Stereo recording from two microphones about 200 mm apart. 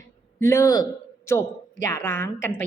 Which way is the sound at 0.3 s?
15° left (ahead or behind).